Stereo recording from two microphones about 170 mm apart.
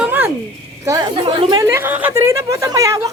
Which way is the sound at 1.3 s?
25° right (ahead or behind).